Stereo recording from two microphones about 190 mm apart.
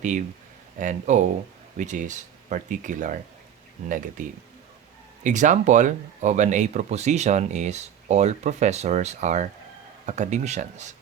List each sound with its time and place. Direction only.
0.8 s speech: 40° right (ahead or behind)